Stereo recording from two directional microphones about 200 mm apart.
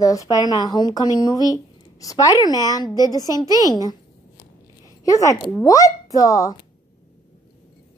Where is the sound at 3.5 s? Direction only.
15° right (ahead or behind).